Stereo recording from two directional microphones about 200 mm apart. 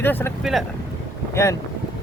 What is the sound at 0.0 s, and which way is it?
Speech, 10° left (ahead or behind).